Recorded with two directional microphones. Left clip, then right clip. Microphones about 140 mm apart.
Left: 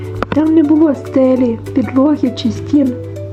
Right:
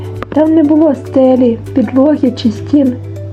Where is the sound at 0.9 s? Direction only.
20° right (ahead or behind).